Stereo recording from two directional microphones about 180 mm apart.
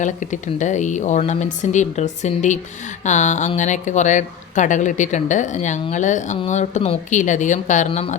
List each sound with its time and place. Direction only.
0.0 s a woman's voice: 45° left (ahead or behind)